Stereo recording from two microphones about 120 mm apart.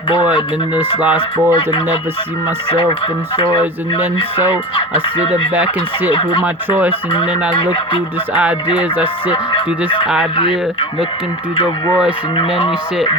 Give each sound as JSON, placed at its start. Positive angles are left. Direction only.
{"t": 0.8, "sound": "speech", "side_deg": -15}
{"t": 3.3, "sound": "speech", "side_deg": 40}
{"t": 5.0, "sound": "speech", "side_deg": 45}
{"t": 6.4, "sound": "speech", "side_deg": -15}
{"t": 7.1, "sound": "speech", "side_deg": 45}
{"t": 8.8, "sound": "speech", "side_deg": -10}
{"t": 9.3, "sound": "speech", "side_deg": 45}
{"t": 12.4, "sound": "speech", "side_deg": 45}